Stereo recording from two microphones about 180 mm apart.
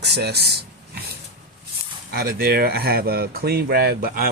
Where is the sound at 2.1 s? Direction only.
60° right (ahead or behind).